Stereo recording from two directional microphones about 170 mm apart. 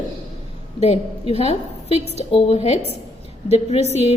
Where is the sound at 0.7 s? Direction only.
35° left (ahead or behind).